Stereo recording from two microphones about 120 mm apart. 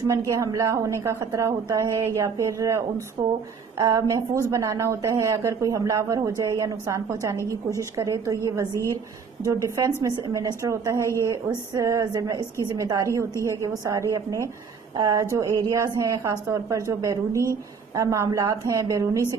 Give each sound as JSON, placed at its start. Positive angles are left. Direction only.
{"t": 0.3, "sound": "a woman's voice", "side_deg": -25}
{"t": 9.4, "sound": "a woman's voice", "side_deg": -25}